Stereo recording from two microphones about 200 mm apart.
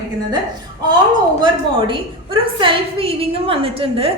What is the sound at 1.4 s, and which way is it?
A woman's voice, 25° right (ahead or behind).